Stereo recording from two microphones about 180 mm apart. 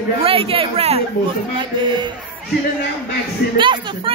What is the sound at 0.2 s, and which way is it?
Speech, 30° right (ahead or behind).